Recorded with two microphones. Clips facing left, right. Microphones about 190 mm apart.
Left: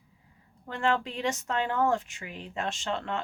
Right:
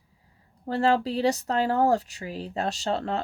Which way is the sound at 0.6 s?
35° right (ahead or behind).